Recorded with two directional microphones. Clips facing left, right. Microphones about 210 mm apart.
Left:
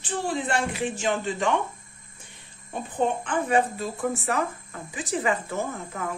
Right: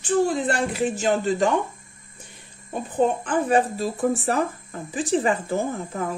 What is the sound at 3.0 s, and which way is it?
Speech, 40° right (ahead or behind).